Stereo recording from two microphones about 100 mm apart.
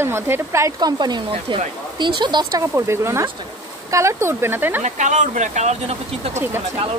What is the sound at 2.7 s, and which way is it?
Speech, 25° right (ahead or behind).